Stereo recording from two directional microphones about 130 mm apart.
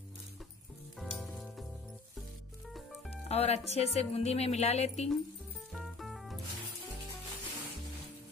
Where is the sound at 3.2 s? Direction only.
55° left (ahead or behind).